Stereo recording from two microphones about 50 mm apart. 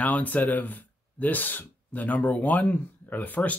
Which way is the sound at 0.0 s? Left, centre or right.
Left.